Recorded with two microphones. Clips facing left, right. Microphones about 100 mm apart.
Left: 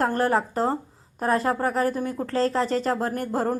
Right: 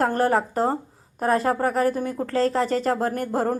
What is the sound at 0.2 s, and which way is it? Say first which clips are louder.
A woman's voice: right 2 dB; 45° right (ahead or behind).